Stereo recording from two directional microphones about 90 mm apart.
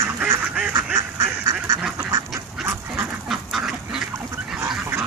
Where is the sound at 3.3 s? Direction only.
5° right (ahead or behind).